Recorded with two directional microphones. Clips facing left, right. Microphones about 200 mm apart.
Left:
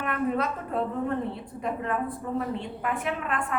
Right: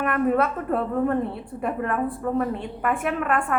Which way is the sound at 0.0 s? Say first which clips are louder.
Right 6 dB; 55° right (ahead or behind).